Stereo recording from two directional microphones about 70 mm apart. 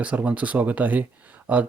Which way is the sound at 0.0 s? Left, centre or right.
Centre.